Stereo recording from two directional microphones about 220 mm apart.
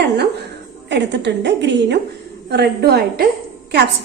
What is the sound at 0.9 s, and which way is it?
A woman's voice, 50° right (ahead or behind).